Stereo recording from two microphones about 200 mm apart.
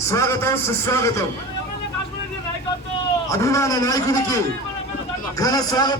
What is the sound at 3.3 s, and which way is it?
A man's voice, 15° left (ahead or behind).